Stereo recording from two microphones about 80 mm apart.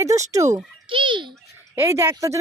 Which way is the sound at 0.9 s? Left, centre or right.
Right.